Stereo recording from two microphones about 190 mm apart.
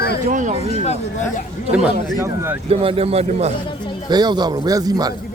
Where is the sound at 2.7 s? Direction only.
30° right (ahead or behind).